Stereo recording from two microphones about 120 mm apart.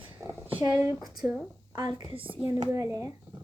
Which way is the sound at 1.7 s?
35° right (ahead or behind).